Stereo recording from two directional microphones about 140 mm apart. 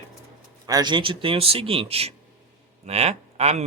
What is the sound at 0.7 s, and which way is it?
A man's voice, 30° right (ahead or behind).